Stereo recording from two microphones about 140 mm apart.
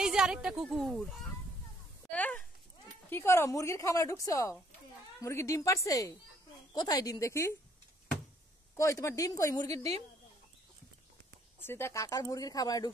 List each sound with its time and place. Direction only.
0.0 s speech: 5° right (ahead or behind)
2.0 s a sound: 10° left (ahead or behind)
3.1 s a woman's voice: 15° left (ahead or behind)
8.7 s a woman's voice: 20° left (ahead or behind)
11.6 s a woman's voice: 15° left (ahead or behind)